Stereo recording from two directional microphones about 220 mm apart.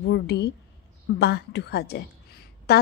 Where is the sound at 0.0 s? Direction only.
50° left (ahead or behind).